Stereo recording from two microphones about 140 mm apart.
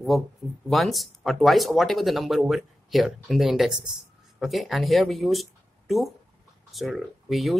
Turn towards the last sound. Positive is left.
turn(degrees=0)  # may be behind; listen again after turning